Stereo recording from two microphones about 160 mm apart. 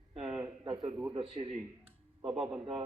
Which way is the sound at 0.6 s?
30° right (ahead or behind).